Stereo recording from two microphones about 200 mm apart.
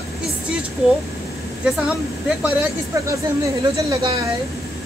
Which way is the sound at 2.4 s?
10° right (ahead or behind).